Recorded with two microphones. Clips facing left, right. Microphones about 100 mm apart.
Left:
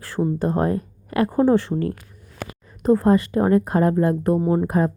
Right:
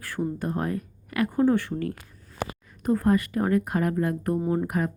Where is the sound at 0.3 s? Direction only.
30° left (ahead or behind).